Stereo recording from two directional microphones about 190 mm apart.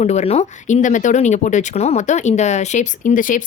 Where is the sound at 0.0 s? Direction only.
35° left (ahead or behind).